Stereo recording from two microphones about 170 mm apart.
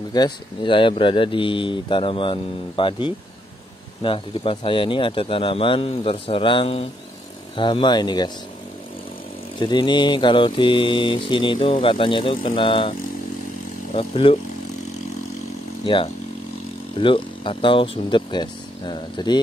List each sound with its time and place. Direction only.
0.1 s mantra: 25° left (ahead or behind)
4.0 s speech: 30° left (ahead or behind)
7.5 s mantra: 30° left (ahead or behind)
9.6 s mantra: 25° left (ahead or behind)
13.9 s speech: 30° left (ahead or behind)
15.8 s speech: 30° left (ahead or behind)
17.0 s mantra: 30° left (ahead or behind)